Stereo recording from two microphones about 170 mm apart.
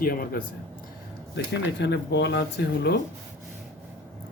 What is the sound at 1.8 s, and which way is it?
Speech, 90° left.